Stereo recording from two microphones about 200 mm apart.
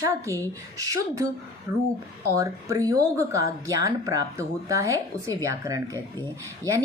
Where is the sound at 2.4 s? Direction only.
15° right (ahead or behind).